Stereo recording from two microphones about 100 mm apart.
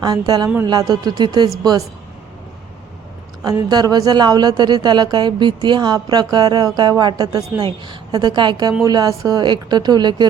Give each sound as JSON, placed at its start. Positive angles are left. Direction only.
{"t": 0.0, "sound": "a woman's voice", "side_deg": -45}
{"t": 3.4, "sound": "a woman's voice", "side_deg": -40}